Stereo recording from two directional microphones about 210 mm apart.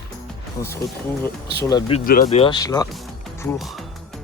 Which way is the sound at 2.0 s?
40° left (ahead or behind).